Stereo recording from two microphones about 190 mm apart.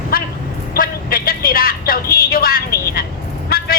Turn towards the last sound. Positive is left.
turn(degrees=55)  # may be behind; listen again after turning